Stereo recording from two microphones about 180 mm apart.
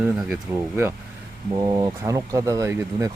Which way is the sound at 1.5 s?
20° right (ahead or behind).